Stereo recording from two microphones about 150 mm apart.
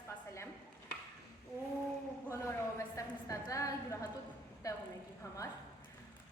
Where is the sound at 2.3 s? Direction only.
20° left (ahead or behind).